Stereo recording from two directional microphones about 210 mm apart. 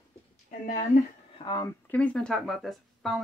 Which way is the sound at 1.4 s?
20° left (ahead or behind).